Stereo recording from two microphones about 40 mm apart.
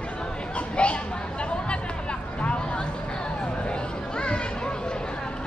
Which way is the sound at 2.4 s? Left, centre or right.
Left.